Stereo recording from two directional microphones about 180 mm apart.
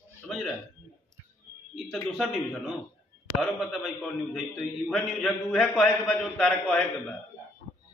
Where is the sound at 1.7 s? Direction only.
Centre (ahead or behind).